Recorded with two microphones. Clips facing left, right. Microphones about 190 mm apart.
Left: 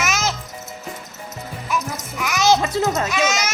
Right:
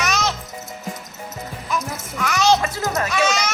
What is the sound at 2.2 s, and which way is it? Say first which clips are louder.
Music: even; 5° left (ahead or behind).